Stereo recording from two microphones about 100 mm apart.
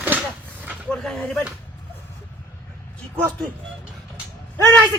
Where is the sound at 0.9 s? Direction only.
5° left (ahead or behind).